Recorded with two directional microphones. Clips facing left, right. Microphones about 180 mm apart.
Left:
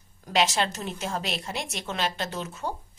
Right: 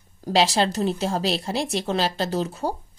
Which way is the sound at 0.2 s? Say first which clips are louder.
Right 5 dB; 35° right (ahead or behind).